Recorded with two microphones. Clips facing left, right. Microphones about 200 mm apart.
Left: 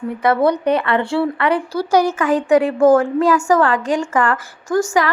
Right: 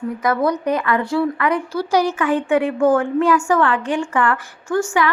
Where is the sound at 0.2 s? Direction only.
30° left (ahead or behind).